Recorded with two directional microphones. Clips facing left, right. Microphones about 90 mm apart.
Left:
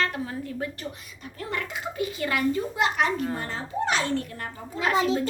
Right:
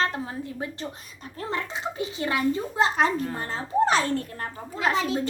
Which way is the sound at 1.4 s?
30° right (ahead or behind).